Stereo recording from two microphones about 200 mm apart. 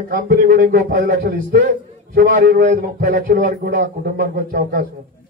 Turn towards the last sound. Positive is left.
turn(degrees=-45)  # may be behind; listen again after turning